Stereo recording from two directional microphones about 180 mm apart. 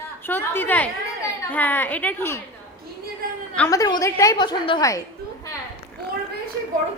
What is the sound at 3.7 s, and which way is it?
A woman's voice, 20° left (ahead or behind).